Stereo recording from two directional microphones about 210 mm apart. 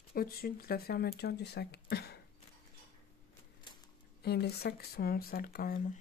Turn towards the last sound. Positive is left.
turn(degrees=45)  # may be behind; listen again after turning